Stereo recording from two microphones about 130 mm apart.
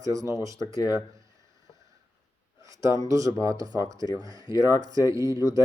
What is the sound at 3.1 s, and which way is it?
Speech, 25° right (ahead or behind).